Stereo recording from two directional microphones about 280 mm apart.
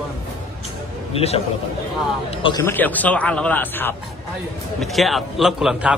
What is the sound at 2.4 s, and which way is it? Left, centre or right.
A man's voice, centre.